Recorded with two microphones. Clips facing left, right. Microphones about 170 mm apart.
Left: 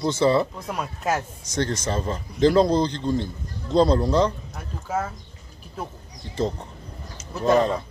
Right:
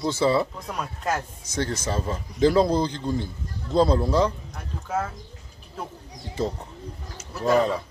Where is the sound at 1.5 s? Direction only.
10° right (ahead or behind).